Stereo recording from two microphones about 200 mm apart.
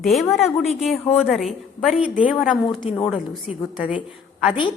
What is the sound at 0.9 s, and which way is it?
A woman's voice, centre (ahead or behind).